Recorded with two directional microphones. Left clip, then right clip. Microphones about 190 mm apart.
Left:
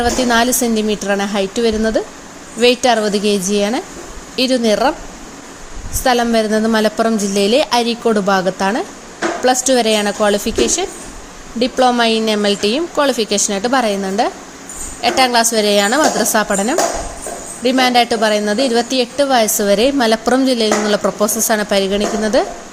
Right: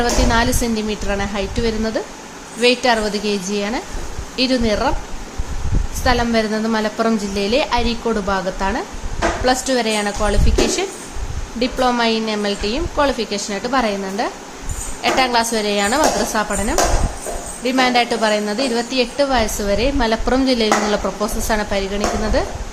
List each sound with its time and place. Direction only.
0.0 s a woman's voice: 25° left (ahead or behind)
6.0 s a woman's voice: 25° left (ahead or behind)